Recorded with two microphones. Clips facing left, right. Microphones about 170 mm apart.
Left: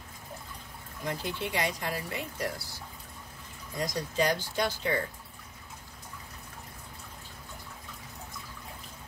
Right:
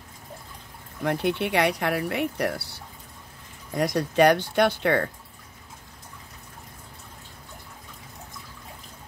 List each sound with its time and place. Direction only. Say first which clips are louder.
1.0 s speech: right 9 dB; 65° right (ahead or behind)